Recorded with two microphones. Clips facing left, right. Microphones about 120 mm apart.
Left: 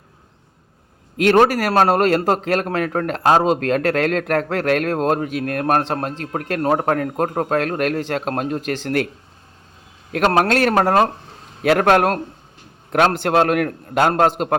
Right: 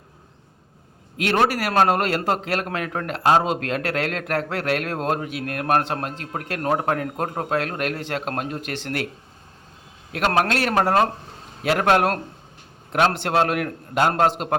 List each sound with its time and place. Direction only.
1.2 s a man's voice: 45° left (ahead or behind)
10.1 s a man's voice: 45° left (ahead or behind)